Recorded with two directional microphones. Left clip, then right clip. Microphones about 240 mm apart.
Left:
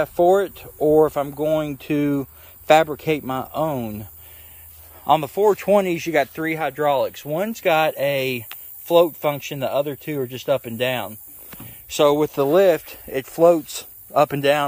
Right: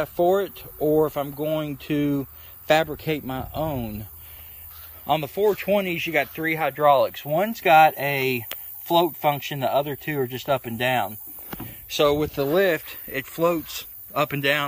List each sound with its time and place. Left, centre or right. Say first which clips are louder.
0.0 s speech: left 4 dB; centre
6.4 s speech: right 1 dB; centre